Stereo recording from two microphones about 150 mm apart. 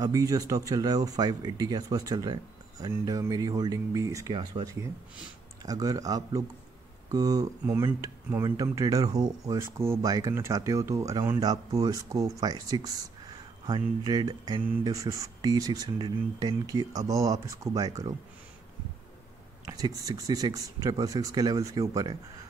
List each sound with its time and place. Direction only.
0.0 s speech: 25° right (ahead or behind)
19.6 s speech: 25° right (ahead or behind)